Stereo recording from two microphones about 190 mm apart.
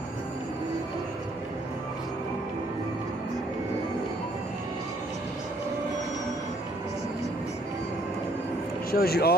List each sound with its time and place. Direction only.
8.9 s speech: 55° left (ahead or behind)